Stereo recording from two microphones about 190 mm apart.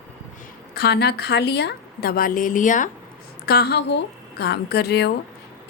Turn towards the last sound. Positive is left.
turn(degrees=60)  # may be behind; listen again after turning